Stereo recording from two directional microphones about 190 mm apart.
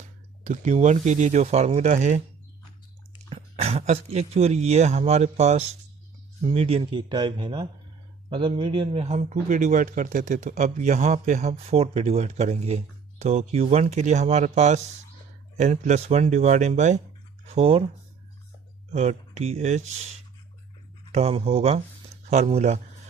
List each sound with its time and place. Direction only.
0.4 s speech: 40° right (ahead or behind)
3.2 s speech: 35° right (ahead or behind)
18.9 s speech: 35° right (ahead or behind)
21.1 s speech: 35° right (ahead or behind)